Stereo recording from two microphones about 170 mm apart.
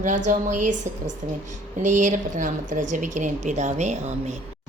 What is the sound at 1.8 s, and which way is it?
A woman's voice, 45° right (ahead or behind).